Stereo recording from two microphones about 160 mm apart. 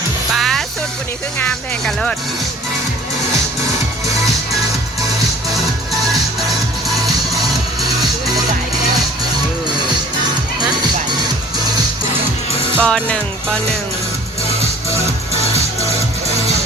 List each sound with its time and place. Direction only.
0.3 s music: centre (ahead or behind)
1.4 s speech: 5° left (ahead or behind)
12.8 s speech: 5° left (ahead or behind)
15.3 s music: 40° left (ahead or behind)